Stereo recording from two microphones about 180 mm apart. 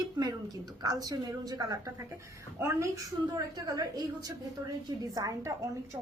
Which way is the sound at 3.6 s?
20° right (ahead or behind).